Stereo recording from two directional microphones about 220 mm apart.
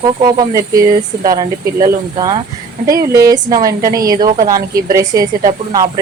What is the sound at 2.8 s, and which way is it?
Speech, 15° right (ahead or behind).